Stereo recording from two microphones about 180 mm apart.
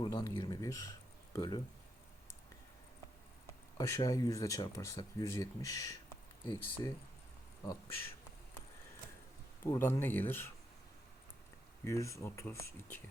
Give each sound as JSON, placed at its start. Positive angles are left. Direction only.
{"t": 0.0, "sound": "speech", "side_deg": 20}
{"t": 3.8, "sound": "speech", "side_deg": 20}
{"t": 9.6, "sound": "speech", "side_deg": 15}
{"t": 11.9, "sound": "speech", "side_deg": 15}